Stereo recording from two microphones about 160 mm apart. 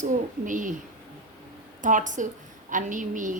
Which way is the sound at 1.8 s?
55° right (ahead or behind).